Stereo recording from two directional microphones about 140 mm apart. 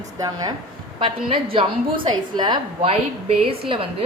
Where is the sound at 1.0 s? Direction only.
40° right (ahead or behind).